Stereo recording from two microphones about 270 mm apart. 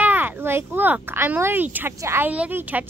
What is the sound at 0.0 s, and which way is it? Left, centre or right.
Speech, centre.